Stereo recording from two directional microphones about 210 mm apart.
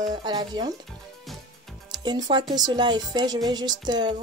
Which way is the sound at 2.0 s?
20° right (ahead or behind).